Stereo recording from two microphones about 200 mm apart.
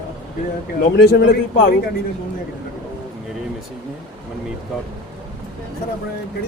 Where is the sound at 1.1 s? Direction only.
50° left (ahead or behind).